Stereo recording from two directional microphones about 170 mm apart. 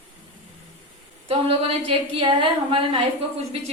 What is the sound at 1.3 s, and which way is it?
Speech, 30° right (ahead or behind).